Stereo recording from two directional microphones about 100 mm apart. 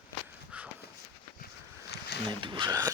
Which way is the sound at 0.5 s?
10° right (ahead or behind).